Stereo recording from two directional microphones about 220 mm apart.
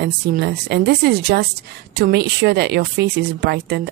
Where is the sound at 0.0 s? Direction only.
45° right (ahead or behind).